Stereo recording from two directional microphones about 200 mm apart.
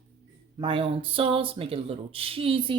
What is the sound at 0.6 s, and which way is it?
Speech, 25° right (ahead or behind).